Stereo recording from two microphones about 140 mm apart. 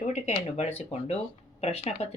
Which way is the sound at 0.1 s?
60° left (ahead or behind).